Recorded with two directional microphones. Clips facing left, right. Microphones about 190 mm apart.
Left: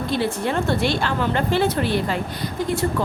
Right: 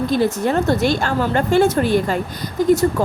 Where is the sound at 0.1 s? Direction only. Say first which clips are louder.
Right 3 dB; 45° right (ahead or behind).